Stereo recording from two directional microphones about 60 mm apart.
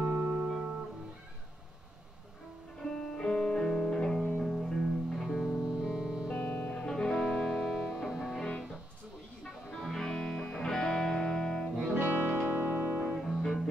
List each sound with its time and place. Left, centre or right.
0.0 s music: right
2.8 s music: centre
6.7 s music: centre
8.4 s music: centre
9.8 s music: centre
11.9 s music: right
13.2 s music: centre